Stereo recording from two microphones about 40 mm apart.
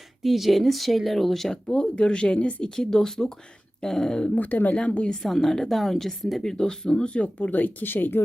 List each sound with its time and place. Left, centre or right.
0.2 s speech: centre
1.6 s speech: centre
2.7 s speech: centre
4.4 s speech: left
4.8 s speech: left
5.2 s speech: centre; by 8.2 s left